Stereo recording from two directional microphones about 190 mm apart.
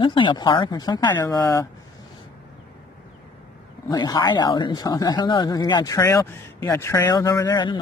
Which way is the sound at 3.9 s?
20° left (ahead or behind).